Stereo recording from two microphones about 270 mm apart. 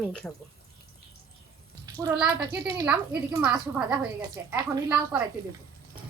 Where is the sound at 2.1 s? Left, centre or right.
Centre.